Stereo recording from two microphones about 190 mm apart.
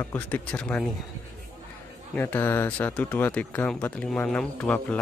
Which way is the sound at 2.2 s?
10° left (ahead or behind).